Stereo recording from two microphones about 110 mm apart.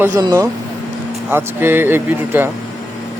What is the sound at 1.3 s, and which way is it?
Speech, 20° right (ahead or behind).